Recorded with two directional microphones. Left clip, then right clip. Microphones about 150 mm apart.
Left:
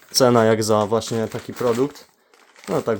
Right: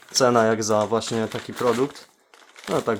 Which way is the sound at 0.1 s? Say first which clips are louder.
Left 3 dB; 45° left (ahead or behind).